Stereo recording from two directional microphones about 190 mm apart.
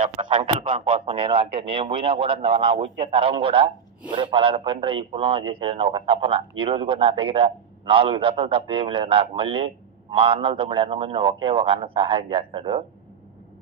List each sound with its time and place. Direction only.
0.2 s a man's voice: 25° right (ahead or behind)